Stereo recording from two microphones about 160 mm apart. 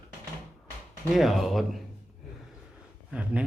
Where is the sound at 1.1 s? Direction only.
Centre (ahead or behind).